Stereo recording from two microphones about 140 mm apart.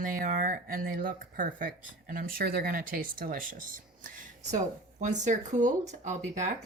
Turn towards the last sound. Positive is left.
turn(degrees=-55)  # may be behind; listen again after turning